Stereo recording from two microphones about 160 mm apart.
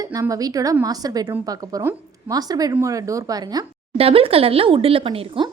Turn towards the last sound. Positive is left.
turn(degrees=-35)  # may be behind; listen again after turning